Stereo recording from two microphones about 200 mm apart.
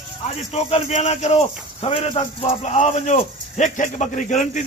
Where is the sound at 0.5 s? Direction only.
35° left (ahead or behind).